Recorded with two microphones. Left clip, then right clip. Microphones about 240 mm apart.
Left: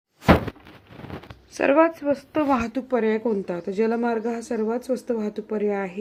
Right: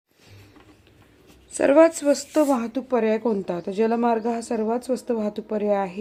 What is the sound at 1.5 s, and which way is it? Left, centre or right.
A woman's voice, centre.